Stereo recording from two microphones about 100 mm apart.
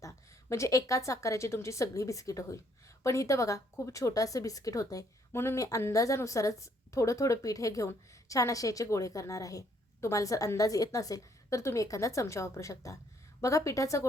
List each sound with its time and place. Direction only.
0.0 s speech: 30° left (ahead or behind)